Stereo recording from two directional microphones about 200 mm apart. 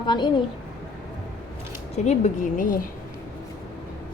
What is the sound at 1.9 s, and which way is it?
Speech, 35° left (ahead or behind).